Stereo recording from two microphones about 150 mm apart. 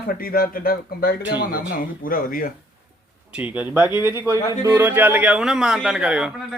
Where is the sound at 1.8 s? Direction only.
70° left (ahead or behind).